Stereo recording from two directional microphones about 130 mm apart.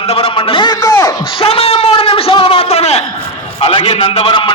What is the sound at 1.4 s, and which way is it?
A man's voice, 45° left (ahead or behind).